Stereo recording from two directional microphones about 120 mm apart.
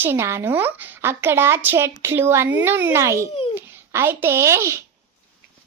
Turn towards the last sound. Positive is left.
turn(degrees=-25)  # may be behind; listen again after turning